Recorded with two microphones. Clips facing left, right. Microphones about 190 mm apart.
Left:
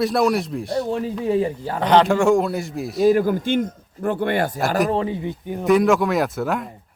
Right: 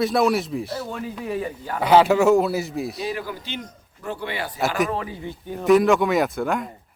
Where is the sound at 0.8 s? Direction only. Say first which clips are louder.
Left 7 dB; 30° left (ahead or behind).